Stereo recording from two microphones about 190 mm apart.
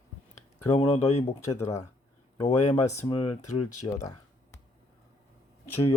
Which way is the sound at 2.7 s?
15° left (ahead or behind).